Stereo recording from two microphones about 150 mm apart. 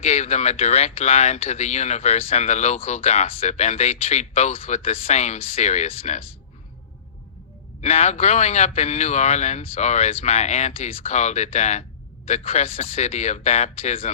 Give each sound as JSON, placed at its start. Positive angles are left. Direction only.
{"t": 0.0, "sound": "a man's voice", "side_deg": 50}
{"t": 7.8, "sound": "a man's voice", "side_deg": 45}